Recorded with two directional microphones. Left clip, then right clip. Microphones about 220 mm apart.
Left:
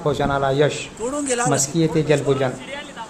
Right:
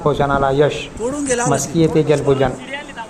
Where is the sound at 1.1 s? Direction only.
45° left (ahead or behind).